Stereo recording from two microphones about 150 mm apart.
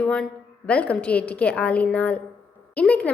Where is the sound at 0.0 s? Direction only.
5° left (ahead or behind).